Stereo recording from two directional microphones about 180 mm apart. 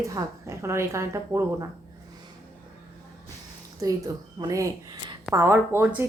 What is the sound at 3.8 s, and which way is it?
A woman's voice, 20° right (ahead or behind).